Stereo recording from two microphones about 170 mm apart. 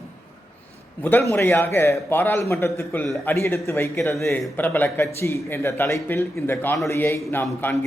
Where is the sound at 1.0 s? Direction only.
10° left (ahead or behind).